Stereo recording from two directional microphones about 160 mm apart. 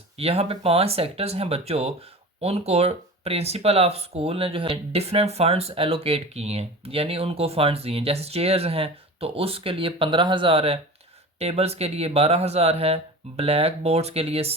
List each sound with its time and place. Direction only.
0.2 s speech: 40° right (ahead or behind)